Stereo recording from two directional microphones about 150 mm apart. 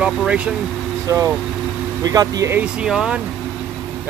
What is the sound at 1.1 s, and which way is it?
Speech, 20° right (ahead or behind).